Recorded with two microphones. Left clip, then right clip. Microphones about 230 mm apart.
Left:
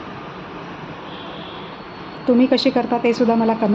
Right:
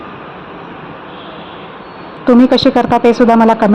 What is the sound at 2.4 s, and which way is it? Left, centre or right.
Speech, right.